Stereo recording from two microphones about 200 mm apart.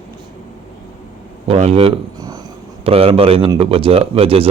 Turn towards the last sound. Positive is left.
turn(degrees=-30)  # may be behind; listen again after turning